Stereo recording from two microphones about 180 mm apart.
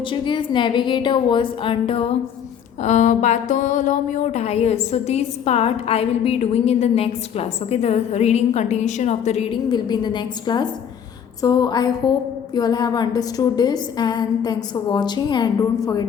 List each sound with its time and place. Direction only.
0.1 s a woman's voice: 25° left (ahead or behind)
2.8 s a sound: 40° left (ahead or behind); by 10.7 s 25° left (ahead or behind)
11.4 s a woman's voice: 20° left (ahead or behind)